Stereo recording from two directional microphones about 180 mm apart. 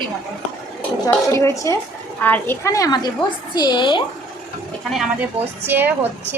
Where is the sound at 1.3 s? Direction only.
15° left (ahead or behind).